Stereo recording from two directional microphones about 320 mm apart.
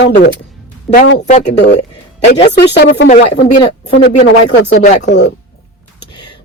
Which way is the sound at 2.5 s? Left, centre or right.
Left.